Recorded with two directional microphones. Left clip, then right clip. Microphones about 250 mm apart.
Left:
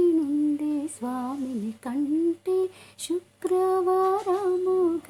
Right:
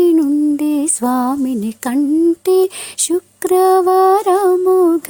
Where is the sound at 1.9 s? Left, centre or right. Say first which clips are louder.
Right 12 dB; right.